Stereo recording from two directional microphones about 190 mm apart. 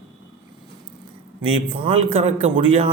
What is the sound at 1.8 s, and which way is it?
A man's voice, 30° right (ahead or behind).